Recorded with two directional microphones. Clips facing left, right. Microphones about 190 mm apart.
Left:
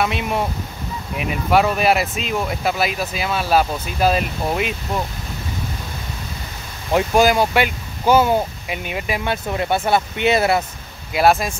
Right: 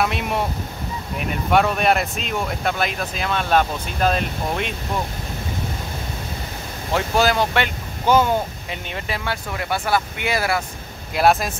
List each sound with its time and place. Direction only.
0.0 s speech: centre (ahead or behind)
6.9 s speech: 15° left (ahead or behind)
11.1 s speech: centre (ahead or behind)